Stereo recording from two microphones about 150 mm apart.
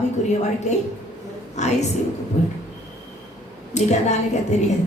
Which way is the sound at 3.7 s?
50° left (ahead or behind).